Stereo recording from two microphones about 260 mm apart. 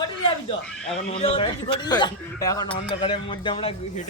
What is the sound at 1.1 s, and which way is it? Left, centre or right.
A man's voice, left.